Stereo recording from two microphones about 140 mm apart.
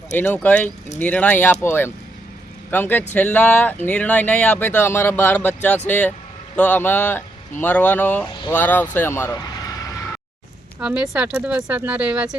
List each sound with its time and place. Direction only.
0.1 s speech: 15° left (ahead or behind)
10.8 s speech: 5° right (ahead or behind)